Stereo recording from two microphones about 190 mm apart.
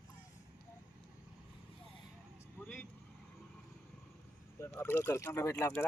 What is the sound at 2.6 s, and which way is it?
Vehicle, 10° left (ahead or behind).